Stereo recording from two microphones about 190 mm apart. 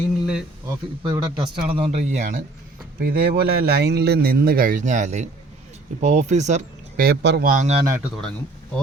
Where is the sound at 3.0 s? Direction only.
50° right (ahead or behind); by 7.9 s 35° right (ahead or behind).